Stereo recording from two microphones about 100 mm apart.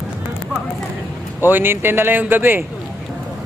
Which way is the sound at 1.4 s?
20° right (ahead or behind).